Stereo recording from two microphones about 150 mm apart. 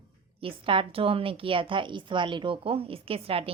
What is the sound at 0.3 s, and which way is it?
A woman's voice, 35° right (ahead or behind).